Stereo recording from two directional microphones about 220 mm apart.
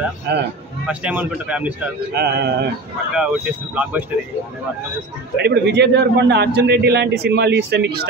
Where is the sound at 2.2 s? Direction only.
50° right (ahead or behind).